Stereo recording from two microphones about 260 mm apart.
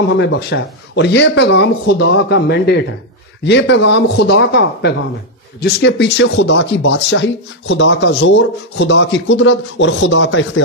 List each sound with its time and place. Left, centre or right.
0.2 s speech: left